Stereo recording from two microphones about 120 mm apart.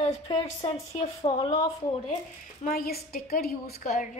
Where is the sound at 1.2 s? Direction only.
50° left (ahead or behind).